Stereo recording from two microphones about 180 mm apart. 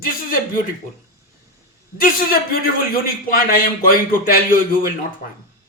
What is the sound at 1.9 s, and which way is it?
A man's voice, 50° left (ahead or behind).